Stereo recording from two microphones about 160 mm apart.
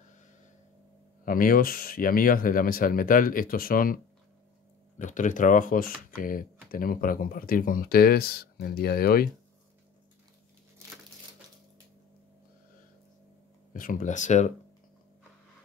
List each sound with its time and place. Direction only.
1.2 s speech: 60° left (ahead or behind)
4.9 s speech: 50° left (ahead or behind); by 9.3 s 70° left (ahead or behind)
13.7 s speech: 55° left (ahead or behind)